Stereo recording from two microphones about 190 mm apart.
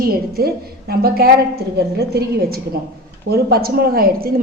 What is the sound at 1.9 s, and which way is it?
A woman's voice, 55° right (ahead or behind).